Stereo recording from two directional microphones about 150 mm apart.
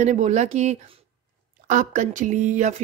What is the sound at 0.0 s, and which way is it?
Speech, 50° right (ahead or behind).